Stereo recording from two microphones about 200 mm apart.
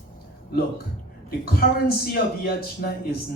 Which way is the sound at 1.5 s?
50° left (ahead or behind).